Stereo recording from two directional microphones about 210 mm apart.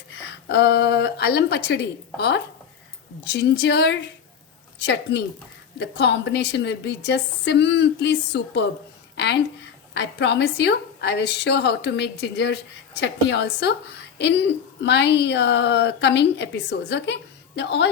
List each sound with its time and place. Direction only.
0.4 s a woman's voice: 50° left (ahead or behind)
5.1 s a woman's voice: 50° left (ahead or behind)
9.1 s a sound: 55° left (ahead or behind)
9.9 s speech: 55° left (ahead or behind)